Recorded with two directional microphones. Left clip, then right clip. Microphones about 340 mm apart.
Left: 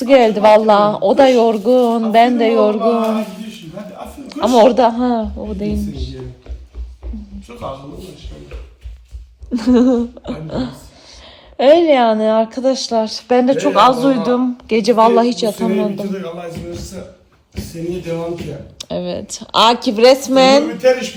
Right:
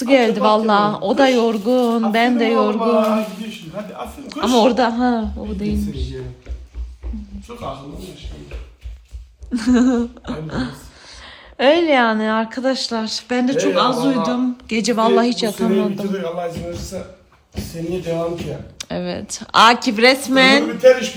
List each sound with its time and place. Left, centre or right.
0.0 s a man's voice: centre
4.3 s a man's voice: centre
9.5 s a man's voice: centre
18.9 s speech: centre
19.5 s a man's voice: centre